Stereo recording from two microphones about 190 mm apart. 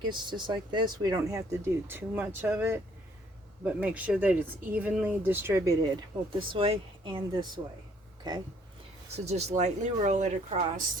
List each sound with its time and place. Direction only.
0.0 s speech: 25° right (ahead or behind)
6.5 s speech: 30° right (ahead or behind)
9.1 s speech: 35° right (ahead or behind)